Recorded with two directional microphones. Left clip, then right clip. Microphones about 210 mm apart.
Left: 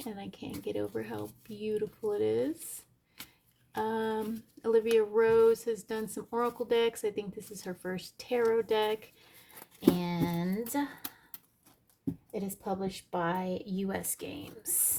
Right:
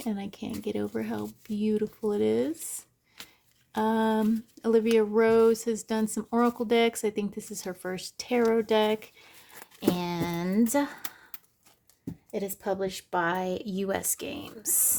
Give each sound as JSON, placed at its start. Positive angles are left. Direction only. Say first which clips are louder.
{"t": 0.0, "sound": "speech", "louder": "right 6 dB", "side_deg": -25}
{"t": 3.2, "sound": "shuffling cards", "louder": "right 3 dB", "side_deg": -10}
{"t": 3.7, "sound": "a woman's voice", "louder": "right 6 dB", "side_deg": -25}
{"t": 12.3, "sound": "a woman's voice", "louder": "right 7 dB", "side_deg": -40}